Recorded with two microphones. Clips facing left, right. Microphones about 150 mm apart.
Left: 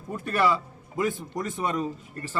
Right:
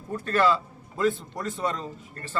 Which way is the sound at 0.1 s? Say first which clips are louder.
Right 1 dB; 15° left (ahead or behind).